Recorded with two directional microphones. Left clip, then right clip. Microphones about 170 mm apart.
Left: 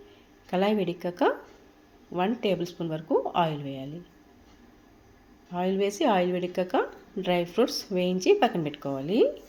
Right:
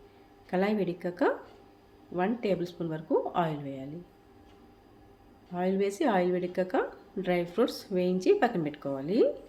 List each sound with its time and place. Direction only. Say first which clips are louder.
0.5 s a woman's voice: left 3 dB; 15° left (ahead or behind)
5.5 s a woman's voice: left 2 dB; 15° left (ahead or behind)